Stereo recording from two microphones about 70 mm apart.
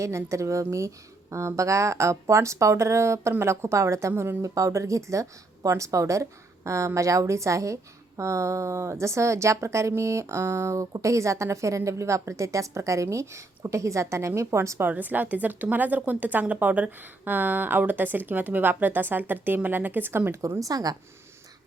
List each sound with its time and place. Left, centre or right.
0.0 s a woman's voice: right
14.8 s speech: right
20.6 s speech: right